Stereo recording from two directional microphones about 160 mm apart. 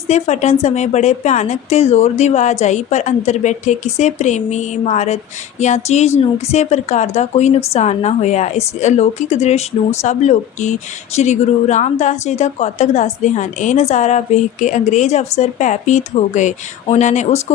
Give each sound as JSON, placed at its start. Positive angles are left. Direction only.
{"t": 0.1, "sound": "speech", "side_deg": 45}